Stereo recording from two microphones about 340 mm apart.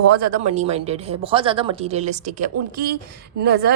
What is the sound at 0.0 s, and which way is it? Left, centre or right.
Speech, right.